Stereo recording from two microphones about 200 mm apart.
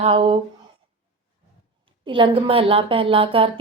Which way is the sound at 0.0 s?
30° right (ahead or behind).